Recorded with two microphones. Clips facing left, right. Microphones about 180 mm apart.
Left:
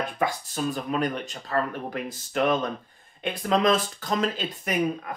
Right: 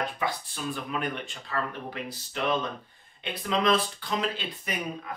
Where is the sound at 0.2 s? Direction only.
40° left (ahead or behind).